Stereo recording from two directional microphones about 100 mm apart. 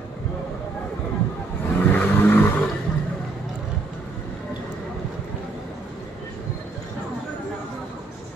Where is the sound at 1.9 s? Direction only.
20° left (ahead or behind).